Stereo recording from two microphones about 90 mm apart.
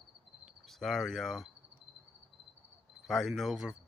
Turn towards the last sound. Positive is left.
turn(degrees=-5)  # may be behind; listen again after turning